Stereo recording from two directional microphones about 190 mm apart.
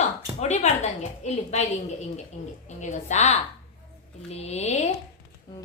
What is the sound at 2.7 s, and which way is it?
Speech, 40° left (ahead or behind).